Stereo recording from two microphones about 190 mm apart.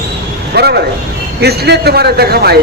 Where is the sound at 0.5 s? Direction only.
55° right (ahead or behind).